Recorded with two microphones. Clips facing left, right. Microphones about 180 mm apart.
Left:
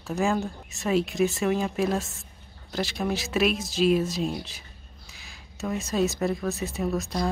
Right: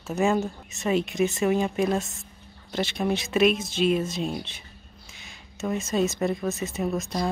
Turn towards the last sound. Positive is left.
turn(degrees=0)  # may be behind; listen again after turning